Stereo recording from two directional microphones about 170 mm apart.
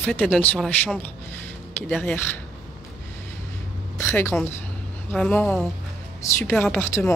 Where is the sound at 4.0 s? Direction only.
15° left (ahead or behind).